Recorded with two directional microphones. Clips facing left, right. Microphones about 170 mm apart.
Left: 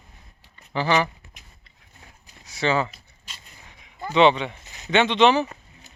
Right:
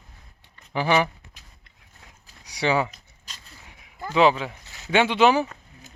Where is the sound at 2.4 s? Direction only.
15° right (ahead or behind).